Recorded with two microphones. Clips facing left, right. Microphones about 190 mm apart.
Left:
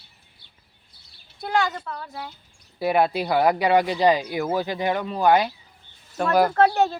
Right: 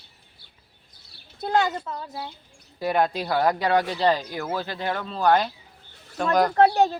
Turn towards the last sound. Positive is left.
turn(degrees=-15)  # may be behind; listen again after turning